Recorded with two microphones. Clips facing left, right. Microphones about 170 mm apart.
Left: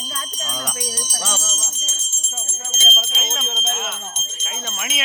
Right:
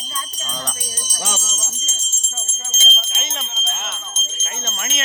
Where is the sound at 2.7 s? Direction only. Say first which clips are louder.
Left 2 dB; 50° left (ahead or behind).